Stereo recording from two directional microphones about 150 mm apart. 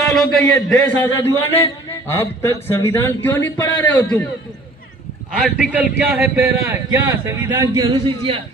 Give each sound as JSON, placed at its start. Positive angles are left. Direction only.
{"t": 0.0, "sound": "a man's voice", "side_deg": 0}
{"t": 5.4, "sound": "a man's voice", "side_deg": -10}